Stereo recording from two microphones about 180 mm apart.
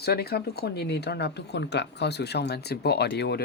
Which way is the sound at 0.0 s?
60° left (ahead or behind).